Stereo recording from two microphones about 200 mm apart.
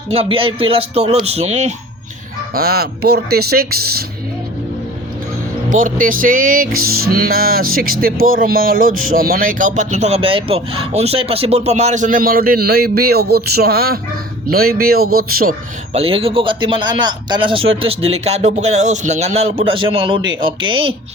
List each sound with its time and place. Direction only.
0.1 s speech: 30° right (ahead or behind)
2.6 s music: 50° right (ahead or behind)
5.7 s music: 45° right (ahead or behind)
15.9 s speech: 30° right (ahead or behind)